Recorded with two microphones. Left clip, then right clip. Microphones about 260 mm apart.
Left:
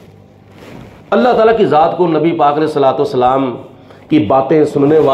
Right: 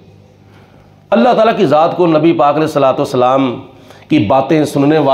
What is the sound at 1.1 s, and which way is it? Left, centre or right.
A man's voice, right.